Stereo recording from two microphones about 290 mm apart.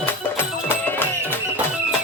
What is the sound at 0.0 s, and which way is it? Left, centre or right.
Music, centre.